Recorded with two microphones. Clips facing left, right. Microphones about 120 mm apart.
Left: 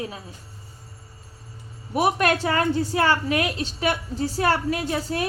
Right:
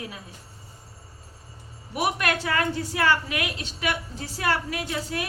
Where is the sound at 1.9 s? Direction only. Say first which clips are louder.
Left 5 dB; 30° left (ahead or behind).